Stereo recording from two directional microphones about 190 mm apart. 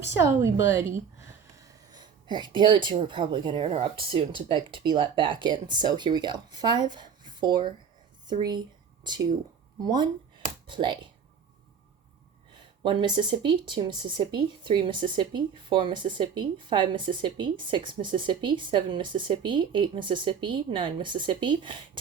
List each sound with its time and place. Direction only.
0.2 s a woman's voice: 15° right (ahead or behind)
9.8 s speech: 20° right (ahead or behind)
12.8 s speech: 25° right (ahead or behind)